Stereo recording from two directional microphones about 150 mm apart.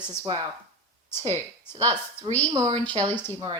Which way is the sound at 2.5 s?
25° right (ahead or behind).